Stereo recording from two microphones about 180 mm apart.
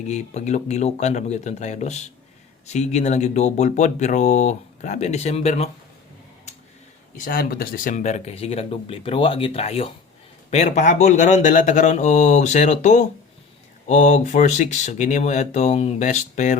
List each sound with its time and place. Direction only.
0.1 s speech: 40° left (ahead or behind)
7.2 s speech: 50° left (ahead or behind)